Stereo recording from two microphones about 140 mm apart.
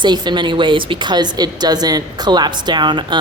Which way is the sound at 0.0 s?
30° right (ahead or behind).